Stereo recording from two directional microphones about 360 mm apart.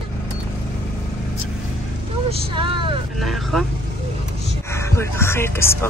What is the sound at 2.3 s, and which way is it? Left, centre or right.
Vehicle, centre.